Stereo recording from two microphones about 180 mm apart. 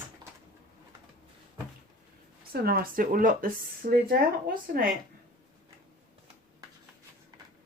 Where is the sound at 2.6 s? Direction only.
55° right (ahead or behind).